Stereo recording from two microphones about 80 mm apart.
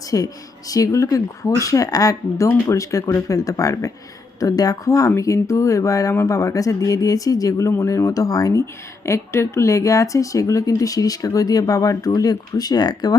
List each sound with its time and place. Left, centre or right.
0.1 s speech: left
7.7 s speech: left
9.0 s speech: left